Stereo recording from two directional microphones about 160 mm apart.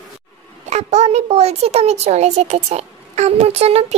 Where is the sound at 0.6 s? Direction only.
45° right (ahead or behind).